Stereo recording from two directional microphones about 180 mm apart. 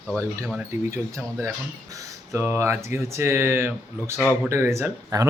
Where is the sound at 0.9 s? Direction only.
15° right (ahead or behind).